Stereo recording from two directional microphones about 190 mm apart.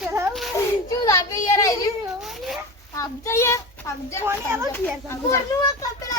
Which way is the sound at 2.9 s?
15° left (ahead or behind).